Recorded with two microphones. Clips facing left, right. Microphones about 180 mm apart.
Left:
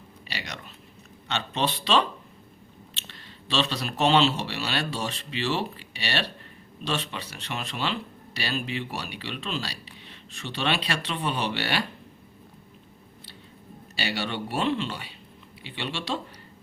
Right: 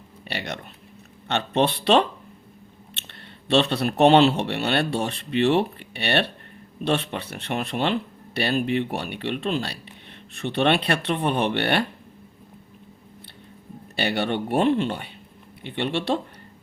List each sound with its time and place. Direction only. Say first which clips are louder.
0.3 s a sound: right 7 dB; 55° right (ahead or behind)
1.3 s speech: right 6 dB; 60° right (ahead or behind)
13.9 s speech: right 6 dB; 55° right (ahead or behind)